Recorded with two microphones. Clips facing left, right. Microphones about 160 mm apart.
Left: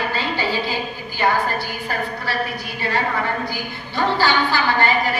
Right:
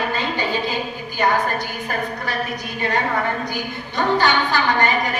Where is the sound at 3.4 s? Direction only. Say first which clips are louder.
Right 1 dB; 20° right (ahead or behind).